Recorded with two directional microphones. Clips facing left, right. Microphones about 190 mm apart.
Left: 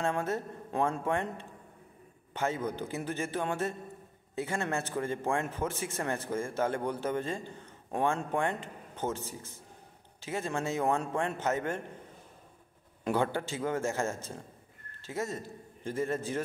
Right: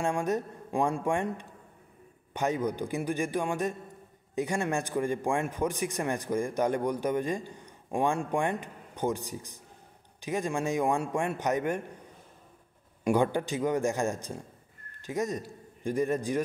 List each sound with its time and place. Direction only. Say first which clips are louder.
0.0 s a man's voice: right 3 dB; 15° right (ahead or behind)
13.0 s a man's voice: right 4 dB; 15° right (ahead or behind)